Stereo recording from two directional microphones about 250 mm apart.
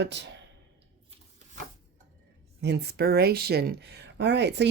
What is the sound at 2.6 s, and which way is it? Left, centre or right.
Speech, right.